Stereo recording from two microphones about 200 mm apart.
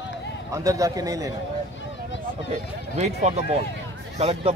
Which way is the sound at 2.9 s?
35° right (ahead or behind).